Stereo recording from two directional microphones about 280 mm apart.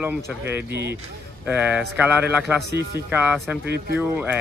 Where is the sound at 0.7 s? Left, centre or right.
Right.